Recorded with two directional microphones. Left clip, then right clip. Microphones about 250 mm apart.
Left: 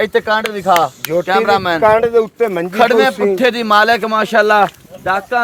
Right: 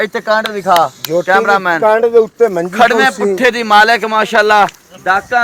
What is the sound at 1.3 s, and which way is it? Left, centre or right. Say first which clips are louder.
Speech: right 3 dB; left.